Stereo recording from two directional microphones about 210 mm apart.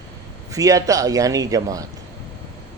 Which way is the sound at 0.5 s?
15° right (ahead or behind).